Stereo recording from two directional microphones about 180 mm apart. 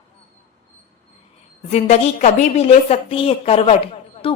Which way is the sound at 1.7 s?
40° left (ahead or behind).